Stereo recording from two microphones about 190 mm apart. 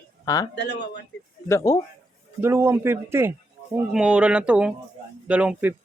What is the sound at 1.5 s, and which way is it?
Speech, 15° left (ahead or behind).